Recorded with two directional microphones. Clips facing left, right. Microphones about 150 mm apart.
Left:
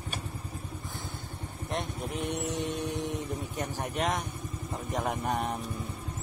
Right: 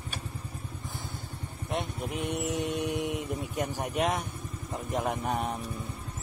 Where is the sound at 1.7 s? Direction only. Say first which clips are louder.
Right 1 dB; 10° right (ahead or behind).